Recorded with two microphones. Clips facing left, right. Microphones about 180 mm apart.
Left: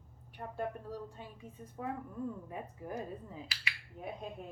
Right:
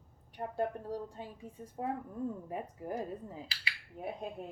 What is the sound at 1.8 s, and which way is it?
Speech, 30° right (ahead or behind).